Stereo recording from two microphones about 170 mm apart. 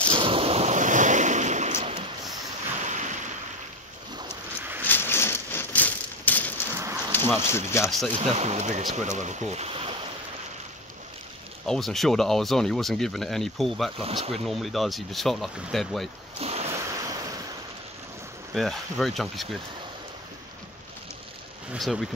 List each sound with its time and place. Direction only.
0.2 s waves: 35° right (ahead or behind)
4.8 s a sound: 10° left (ahead or behind)
7.1 s speech: 15° left (ahead or behind)
8.2 s speech: 40° right (ahead or behind)
11.6 s speech: centre (ahead or behind)
14.0 s speech: 35° right (ahead or behind)
14.4 s speech: centre (ahead or behind)
16.3 s a sound: 40° right (ahead or behind)
16.7 s waves: 20° right (ahead or behind)
18.5 s speech: centre (ahead or behind)
21.7 s speech: centre (ahead or behind)